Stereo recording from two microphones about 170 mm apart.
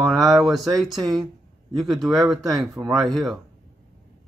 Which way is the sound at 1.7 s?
Centre (ahead or behind).